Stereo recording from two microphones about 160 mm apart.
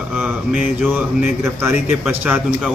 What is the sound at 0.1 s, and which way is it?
A man's voice, 10° right (ahead or behind).